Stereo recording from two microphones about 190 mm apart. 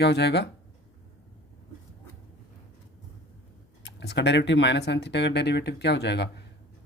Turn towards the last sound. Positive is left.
turn(degrees=60)  # may be behind; listen again after turning